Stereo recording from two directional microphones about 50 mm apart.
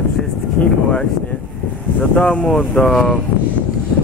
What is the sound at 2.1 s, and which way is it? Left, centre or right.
Speech, centre.